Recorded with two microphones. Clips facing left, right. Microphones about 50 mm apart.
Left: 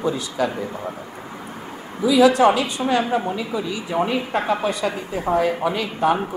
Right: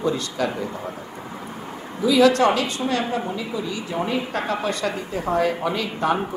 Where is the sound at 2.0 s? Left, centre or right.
Centre; by 4.0 s left.